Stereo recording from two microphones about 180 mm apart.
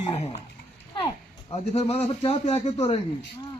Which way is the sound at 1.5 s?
35° left (ahead or behind).